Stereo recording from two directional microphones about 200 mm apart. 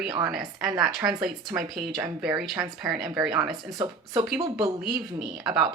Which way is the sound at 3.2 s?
15° right (ahead or behind).